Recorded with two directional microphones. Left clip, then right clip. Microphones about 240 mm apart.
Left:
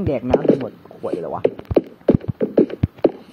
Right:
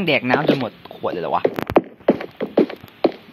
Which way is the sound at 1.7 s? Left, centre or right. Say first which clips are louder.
Right 1 dB; right.